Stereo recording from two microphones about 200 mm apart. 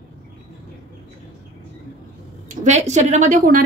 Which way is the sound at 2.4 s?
35° right (ahead or behind).